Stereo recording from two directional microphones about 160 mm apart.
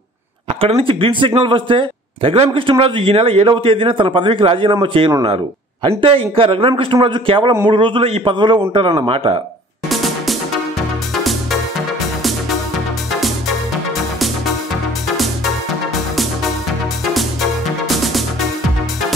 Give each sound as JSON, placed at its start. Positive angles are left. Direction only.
{"t": 0.5, "sound": "speech", "side_deg": -35}
{"t": 9.8, "sound": "music", "side_deg": 0}
{"t": 17.1, "sound": "music", "side_deg": 0}